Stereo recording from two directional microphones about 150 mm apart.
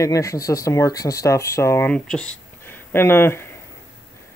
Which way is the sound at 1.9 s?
5° left (ahead or behind).